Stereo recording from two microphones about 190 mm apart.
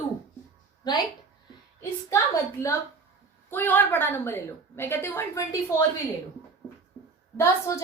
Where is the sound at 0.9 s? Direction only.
20° left (ahead or behind).